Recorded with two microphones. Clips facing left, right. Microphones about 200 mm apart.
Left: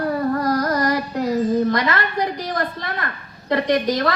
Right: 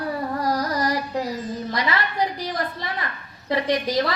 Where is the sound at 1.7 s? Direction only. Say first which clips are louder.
Left 5 dB; 50° left (ahead or behind).